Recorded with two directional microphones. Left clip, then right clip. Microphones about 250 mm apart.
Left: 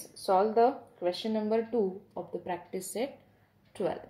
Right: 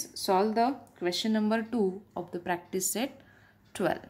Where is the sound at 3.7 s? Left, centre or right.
Right.